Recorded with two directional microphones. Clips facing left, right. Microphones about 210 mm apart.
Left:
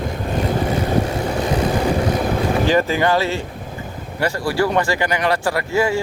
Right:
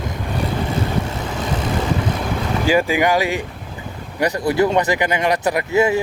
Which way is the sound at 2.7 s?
10° right (ahead or behind).